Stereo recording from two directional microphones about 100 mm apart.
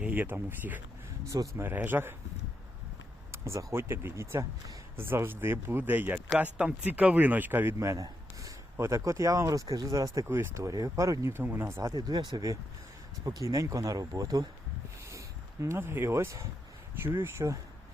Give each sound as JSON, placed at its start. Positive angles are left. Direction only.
{"t": 0.0, "sound": "speech", "side_deg": -20}
{"t": 1.3, "sound": "speech", "side_deg": -30}
{"t": 1.7, "sound": "speech", "side_deg": -20}
{"t": 3.3, "sound": "a man's voice", "side_deg": -30}
{"t": 10.2, "sound": "speech", "side_deg": -25}
{"t": 11.8, "sound": "speech", "side_deg": -40}
{"t": 15.6, "sound": "speech", "side_deg": -25}